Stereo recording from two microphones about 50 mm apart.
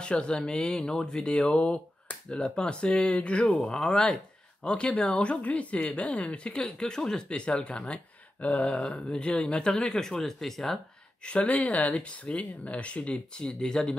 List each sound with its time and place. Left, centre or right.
0.0 s speech: left; by 10.8 s centre
11.2 s speech: left